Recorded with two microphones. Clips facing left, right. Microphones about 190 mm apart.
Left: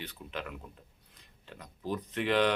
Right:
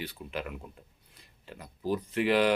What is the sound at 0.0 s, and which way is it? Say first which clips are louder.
Speech: right 4 dB; 10° right (ahead or behind).